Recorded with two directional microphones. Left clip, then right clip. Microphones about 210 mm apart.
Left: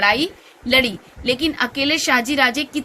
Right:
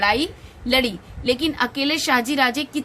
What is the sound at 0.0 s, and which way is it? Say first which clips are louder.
Speech: left 3 dB; 50° right (ahead or behind).